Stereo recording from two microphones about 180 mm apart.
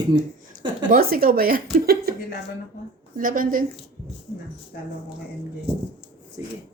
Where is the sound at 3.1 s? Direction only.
50° right (ahead or behind).